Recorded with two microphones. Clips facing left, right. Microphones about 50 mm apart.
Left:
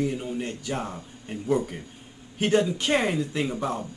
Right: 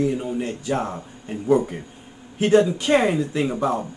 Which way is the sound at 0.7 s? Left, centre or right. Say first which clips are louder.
Right 8 dB; right.